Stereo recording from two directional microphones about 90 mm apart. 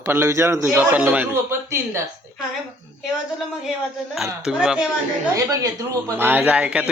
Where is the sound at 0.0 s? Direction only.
30° right (ahead or behind).